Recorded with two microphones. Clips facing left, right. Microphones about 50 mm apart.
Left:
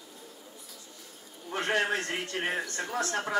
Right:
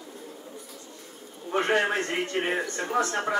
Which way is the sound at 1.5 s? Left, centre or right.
Right.